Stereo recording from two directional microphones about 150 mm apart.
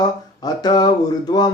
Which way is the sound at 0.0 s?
25° left (ahead or behind).